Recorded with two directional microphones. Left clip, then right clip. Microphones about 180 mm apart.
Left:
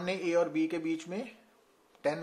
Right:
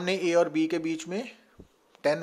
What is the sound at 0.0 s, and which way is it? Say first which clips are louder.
Speech: right 5 dB; 40° right (ahead or behind).